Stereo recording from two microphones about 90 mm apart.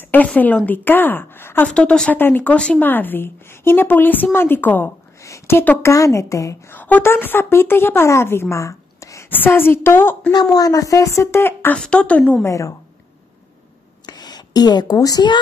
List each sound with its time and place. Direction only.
0.0 s a woman's voice: 20° left (ahead or behind)
1.7 s a woman's voice: 10° left (ahead or behind)
5.2 s speech: 30° left (ahead or behind)
6.7 s a woman's voice: 20° left (ahead or behind)
9.3 s a woman's voice: 20° left (ahead or behind)
10.3 s a woman's voice: 45° left (ahead or behind); by 11.7 s 25° left (ahead or behind)
11.7 s speech: 10° left (ahead or behind)
12.4 s a woman's voice: 35° left (ahead or behind)
14.0 s a sound: 50° left (ahead or behind)